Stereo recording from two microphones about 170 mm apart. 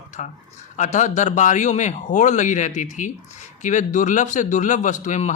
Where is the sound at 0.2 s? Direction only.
45° left (ahead or behind).